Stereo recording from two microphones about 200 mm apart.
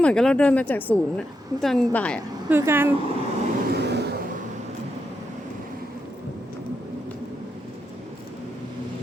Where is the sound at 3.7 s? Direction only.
55° right (ahead or behind).